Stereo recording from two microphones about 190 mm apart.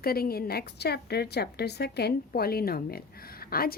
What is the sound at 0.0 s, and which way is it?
A woman's voice, 55° left (ahead or behind).